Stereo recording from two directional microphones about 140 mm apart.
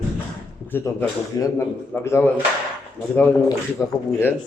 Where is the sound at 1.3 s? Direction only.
25° left (ahead or behind).